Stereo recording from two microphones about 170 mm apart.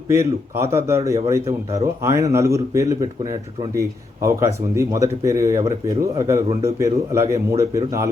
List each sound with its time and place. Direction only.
0.1 s speech: 15° right (ahead or behind)